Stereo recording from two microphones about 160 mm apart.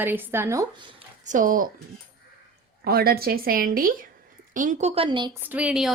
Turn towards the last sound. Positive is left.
turn(degrees=-5)  # may be behind; listen again after turning